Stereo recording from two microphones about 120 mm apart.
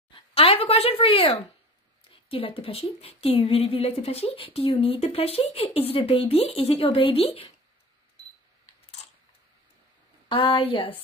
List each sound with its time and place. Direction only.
0.1 s speech: 50° left (ahead or behind)
10.2 s speech: 45° left (ahead or behind)